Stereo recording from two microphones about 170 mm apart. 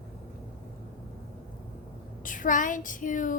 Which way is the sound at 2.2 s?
50° left (ahead or behind).